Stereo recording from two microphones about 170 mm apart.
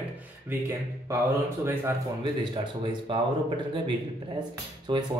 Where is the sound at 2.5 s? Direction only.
30° right (ahead or behind).